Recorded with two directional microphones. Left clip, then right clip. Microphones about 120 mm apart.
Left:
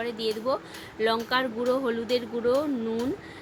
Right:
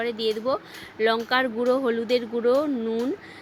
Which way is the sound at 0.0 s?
45° right (ahead or behind).